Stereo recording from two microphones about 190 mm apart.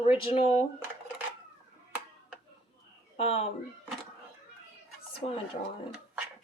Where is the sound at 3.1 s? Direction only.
30° left (ahead or behind).